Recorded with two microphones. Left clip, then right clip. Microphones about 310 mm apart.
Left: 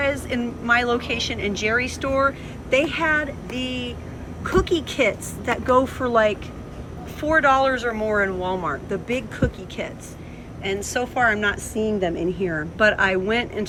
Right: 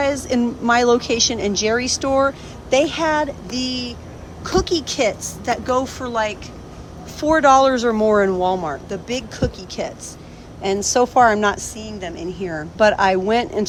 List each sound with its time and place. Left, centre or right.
0.0 s a woman's voice: centre
11.9 s a woman's voice: right
12.1 s speech: centre